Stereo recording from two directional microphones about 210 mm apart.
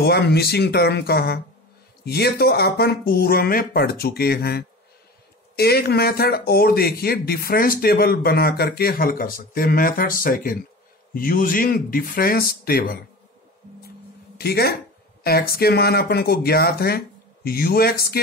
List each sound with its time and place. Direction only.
0.0 s speech: 50° left (ahead or behind)
14.4 s speech: 50° left (ahead or behind)